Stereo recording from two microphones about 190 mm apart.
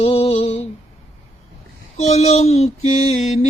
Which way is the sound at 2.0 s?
35° left (ahead or behind).